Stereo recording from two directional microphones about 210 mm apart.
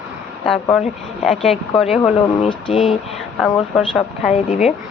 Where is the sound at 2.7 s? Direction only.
Centre (ahead or behind).